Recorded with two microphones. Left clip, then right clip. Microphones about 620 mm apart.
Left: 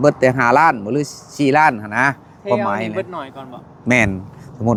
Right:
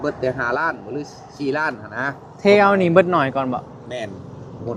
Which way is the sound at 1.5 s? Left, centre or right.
Left.